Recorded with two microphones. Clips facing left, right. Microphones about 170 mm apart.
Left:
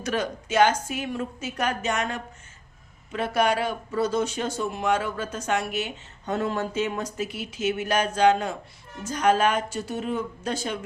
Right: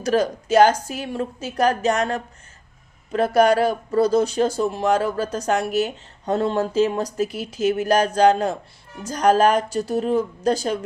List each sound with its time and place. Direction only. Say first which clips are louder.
0.0 s speech: right 7 dB; 35° right (ahead or behind)